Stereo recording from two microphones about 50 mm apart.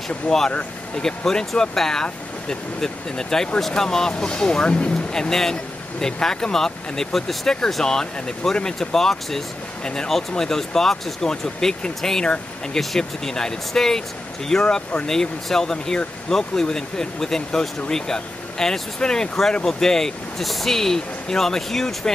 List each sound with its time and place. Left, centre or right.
0.5 s speech: left
1.0 s speech: centre